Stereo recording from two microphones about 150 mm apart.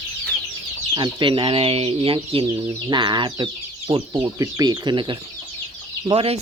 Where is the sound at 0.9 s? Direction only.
30° right (ahead or behind).